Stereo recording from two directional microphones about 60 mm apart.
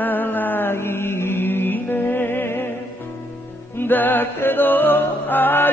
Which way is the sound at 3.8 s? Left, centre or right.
Left.